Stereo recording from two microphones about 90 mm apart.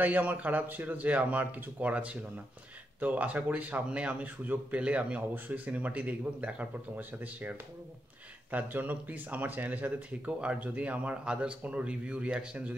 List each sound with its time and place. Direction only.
0.0 s a man's voice: 20° right (ahead or behind)